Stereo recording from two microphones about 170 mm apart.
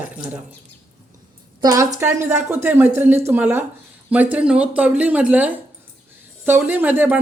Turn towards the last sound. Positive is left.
turn(degrees=-10)  # may be behind; listen again after turning